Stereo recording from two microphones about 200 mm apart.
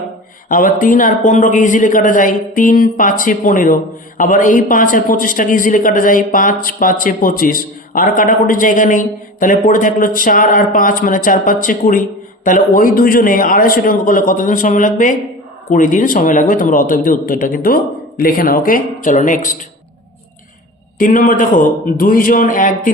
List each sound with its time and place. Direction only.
0.4 s a man's voice: 45° left (ahead or behind)
21.0 s a man's voice: 45° left (ahead or behind)